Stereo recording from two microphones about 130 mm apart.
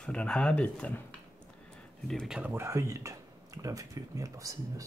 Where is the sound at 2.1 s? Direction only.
5° left (ahead or behind).